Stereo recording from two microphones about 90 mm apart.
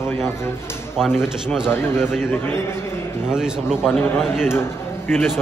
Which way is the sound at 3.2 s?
10° right (ahead or behind).